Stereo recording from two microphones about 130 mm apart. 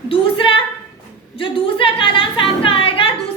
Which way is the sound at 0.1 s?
40° left (ahead or behind).